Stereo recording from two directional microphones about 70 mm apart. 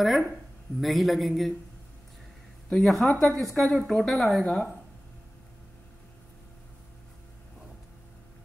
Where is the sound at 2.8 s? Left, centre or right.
Centre.